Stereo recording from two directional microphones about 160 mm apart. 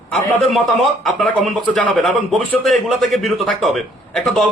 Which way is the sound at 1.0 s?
Centre (ahead or behind).